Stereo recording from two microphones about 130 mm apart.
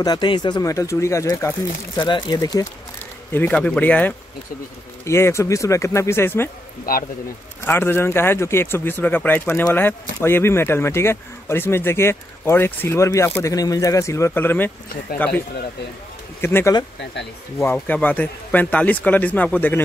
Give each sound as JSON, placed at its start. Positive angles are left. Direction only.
{"t": 0.0, "sound": "speech", "side_deg": 30}
{"t": 2.0, "sound": "speech", "side_deg": 35}
{"t": 3.3, "sound": "speech", "side_deg": 10}
{"t": 6.9, "sound": "speech", "side_deg": 90}
{"t": 7.6, "sound": "speech", "side_deg": 15}
{"t": 17.7, "sound": "speech", "side_deg": 10}